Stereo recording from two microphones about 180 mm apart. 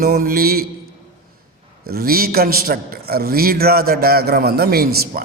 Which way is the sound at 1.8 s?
55° right (ahead or behind).